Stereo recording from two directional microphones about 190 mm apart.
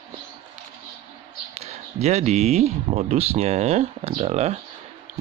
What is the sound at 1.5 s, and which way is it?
Speech, 35° right (ahead or behind).